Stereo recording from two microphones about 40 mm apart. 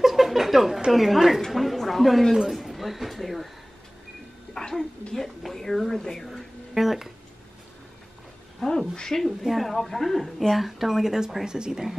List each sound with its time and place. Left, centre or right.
0.0 s a sound: centre
0.9 s speech: centre
1.5 s a sound: centre
4.6 s a sound: centre
5.1 s speech: centre
6.7 s speech: centre
8.5 s a woman's voice: centre
9.4 s speech: centre
10.6 s speech: centre
11.4 s speech: centre